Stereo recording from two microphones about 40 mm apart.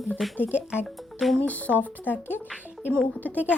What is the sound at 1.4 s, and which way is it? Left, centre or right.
A woman's voice, left.